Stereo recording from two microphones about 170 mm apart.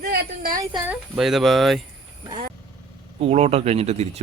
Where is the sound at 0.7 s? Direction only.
Centre (ahead or behind).